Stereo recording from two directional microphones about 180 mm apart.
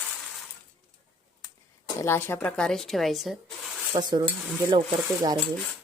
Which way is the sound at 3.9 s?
25° right (ahead or behind).